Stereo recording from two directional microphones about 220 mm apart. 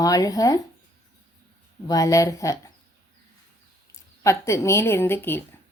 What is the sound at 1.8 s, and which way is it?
Speech, 15° left (ahead or behind).